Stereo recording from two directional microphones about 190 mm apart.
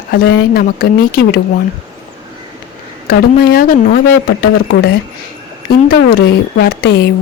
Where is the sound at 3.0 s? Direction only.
55° left (ahead or behind).